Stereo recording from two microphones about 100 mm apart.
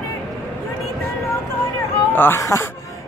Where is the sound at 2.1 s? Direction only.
20° left (ahead or behind).